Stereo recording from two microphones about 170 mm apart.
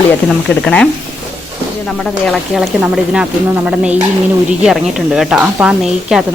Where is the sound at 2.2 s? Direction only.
Centre (ahead or behind).